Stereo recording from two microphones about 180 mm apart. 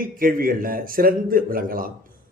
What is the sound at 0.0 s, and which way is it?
A man's voice, 50° right (ahead or behind).